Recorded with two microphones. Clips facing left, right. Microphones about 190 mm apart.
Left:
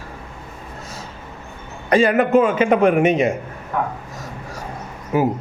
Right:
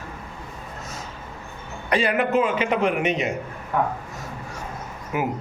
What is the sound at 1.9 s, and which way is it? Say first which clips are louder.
A man's voice: left 7 dB; 45° left (ahead or behind).